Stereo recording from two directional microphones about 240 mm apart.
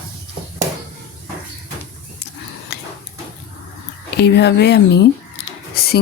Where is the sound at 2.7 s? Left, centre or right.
Left.